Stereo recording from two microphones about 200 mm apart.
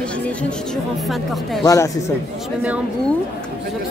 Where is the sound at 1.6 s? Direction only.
15° left (ahead or behind).